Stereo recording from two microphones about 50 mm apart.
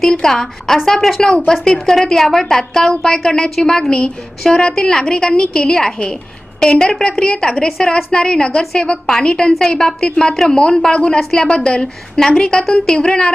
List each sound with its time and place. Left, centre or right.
0.0 s a woman's voice: centre